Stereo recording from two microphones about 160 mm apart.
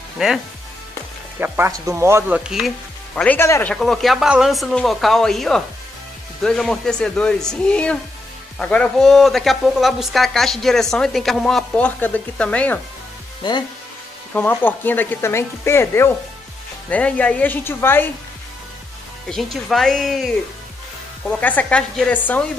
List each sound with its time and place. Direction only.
1.4 s speech: 20° right (ahead or behind)
3.2 s speech: 10° left (ahead or behind)
3.7 s speech: centre (ahead or behind)
13.4 s speech: 30° left (ahead or behind)
14.3 s speech: 10° left (ahead or behind)
19.2 s speech: centre (ahead or behind)
21.3 s speech: 10° left (ahead or behind)